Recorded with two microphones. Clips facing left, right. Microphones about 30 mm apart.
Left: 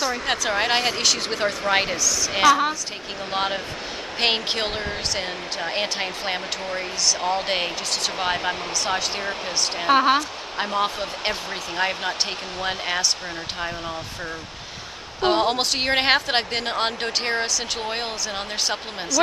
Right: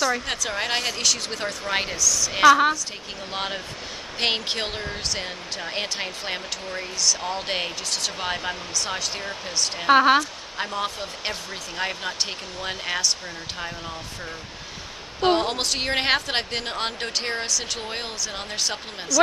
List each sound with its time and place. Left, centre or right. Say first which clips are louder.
0.3 s speech: left 4 dB; centre
2.4 s a woman's voice: right 2 dB; centre
3.3 s speech: left 5 dB; centre
9.8 s a woman's voice: right 2 dB; centre
10.6 s speech: left 4 dB; centre
15.1 s speech: left 1 dB; centre